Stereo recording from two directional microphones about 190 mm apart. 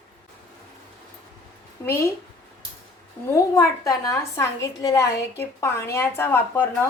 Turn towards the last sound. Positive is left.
turn(degrees=10)  # may be behind; listen again after turning